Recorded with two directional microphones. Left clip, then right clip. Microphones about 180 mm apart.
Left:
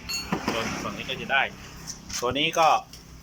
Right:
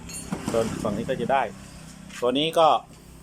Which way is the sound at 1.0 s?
30° right (ahead or behind).